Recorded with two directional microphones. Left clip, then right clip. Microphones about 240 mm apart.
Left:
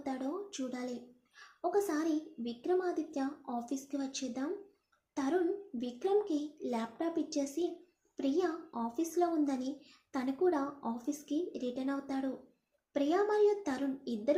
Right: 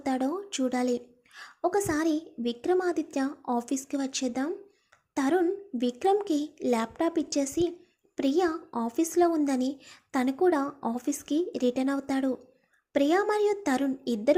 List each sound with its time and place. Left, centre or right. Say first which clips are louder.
0.0 s a woman's voice: right 9 dB; right